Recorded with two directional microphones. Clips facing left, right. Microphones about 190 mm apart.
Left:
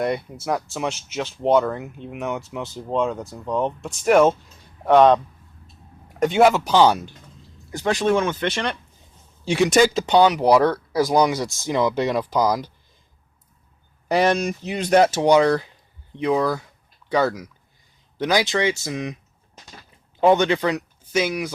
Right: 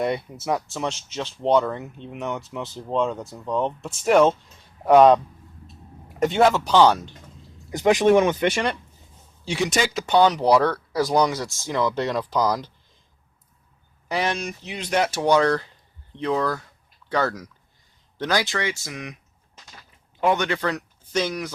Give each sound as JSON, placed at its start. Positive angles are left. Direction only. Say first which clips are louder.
{"t": 0.4, "sound": "speech", "louder": "left 1 dB", "side_deg": 0}
{"t": 6.2, "sound": "speech", "louder": "left 2 dB", "side_deg": 5}
{"t": 7.7, "sound": "speech", "louder": "right 4 dB", "side_deg": -15}
{"t": 9.5, "sound": "speech", "louder": "left 7 dB", "side_deg": 50}
{"t": 10.1, "sound": "speech", "louder": "right 3 dB", "side_deg": 10}
{"t": 14.1, "sound": "speech", "louder": "left 7 dB", "side_deg": 40}
{"t": 15.1, "sound": "speech", "louder": "left 3 dB", "side_deg": 15}
{"t": 20.2, "sound": "speech", "louder": "left 5 dB", "side_deg": 25}